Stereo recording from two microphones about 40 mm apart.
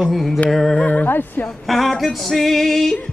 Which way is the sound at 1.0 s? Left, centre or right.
Left.